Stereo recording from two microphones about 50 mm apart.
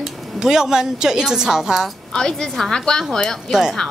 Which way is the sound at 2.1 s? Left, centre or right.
Centre.